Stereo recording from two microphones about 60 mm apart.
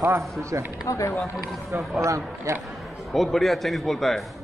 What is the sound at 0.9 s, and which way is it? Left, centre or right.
Speech, left.